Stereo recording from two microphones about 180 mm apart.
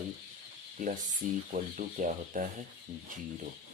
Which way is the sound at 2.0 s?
45° right (ahead or behind).